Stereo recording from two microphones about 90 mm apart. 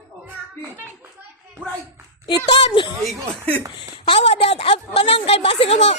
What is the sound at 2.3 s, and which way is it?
Speech, 55° left (ahead or behind).